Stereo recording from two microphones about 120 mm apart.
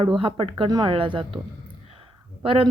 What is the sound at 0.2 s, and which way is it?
Speech, 50° right (ahead or behind).